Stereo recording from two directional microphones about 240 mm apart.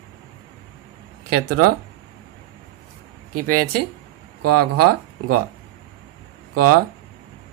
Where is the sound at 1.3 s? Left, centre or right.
Right.